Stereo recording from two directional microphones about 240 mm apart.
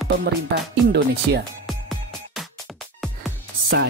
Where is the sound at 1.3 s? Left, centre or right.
Right.